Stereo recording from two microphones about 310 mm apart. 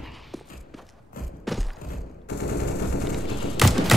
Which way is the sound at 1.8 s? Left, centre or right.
Left.